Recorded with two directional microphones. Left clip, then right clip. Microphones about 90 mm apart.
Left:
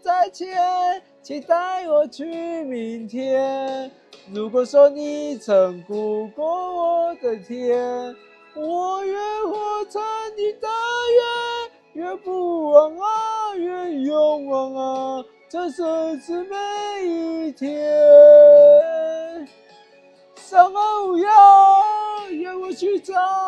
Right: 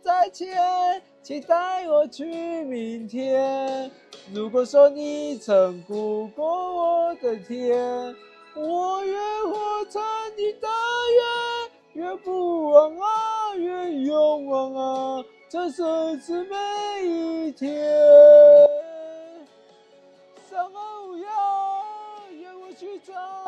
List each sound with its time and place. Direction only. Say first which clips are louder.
0.0 s music: left 2 dB; 40° left (ahead or behind)
4.3 s music: left 2 dB; 30° left (ahead or behind); by 7.4 s 45° left (ahead or behind)
7.4 s music: left 2 dB; 30° left (ahead or behind); by 10.5 s 50° left (ahead or behind)
10.5 s music: left 1 dB; 30° left (ahead or behind); by 14.2 s 50° left (ahead or behind)
14.2 s music: left 2 dB; 30° left (ahead or behind); by 17.3 s 50° left (ahead or behind)
17.3 s a sound: left 2 dB; 35° left (ahead or behind)
20.5 s speech: left 16 dB; 50° left (ahead or behind)
21.0 s speech: left 16 dB; 30° left (ahead or behind)